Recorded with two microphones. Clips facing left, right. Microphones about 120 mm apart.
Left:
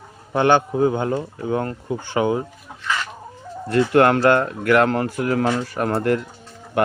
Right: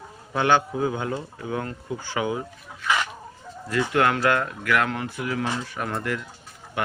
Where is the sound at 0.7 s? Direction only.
35° left (ahead or behind).